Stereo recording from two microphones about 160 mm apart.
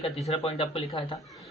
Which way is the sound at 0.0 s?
40° left (ahead or behind).